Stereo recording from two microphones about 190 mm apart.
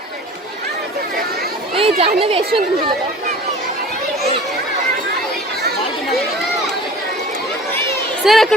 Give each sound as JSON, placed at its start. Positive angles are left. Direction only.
{"t": 1.7, "sound": "a child's voice", "side_deg": -30}
{"t": 8.2, "sound": "speech", "side_deg": 0}